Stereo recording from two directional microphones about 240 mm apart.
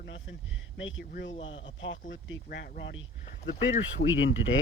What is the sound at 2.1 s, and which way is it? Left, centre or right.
Speech, left.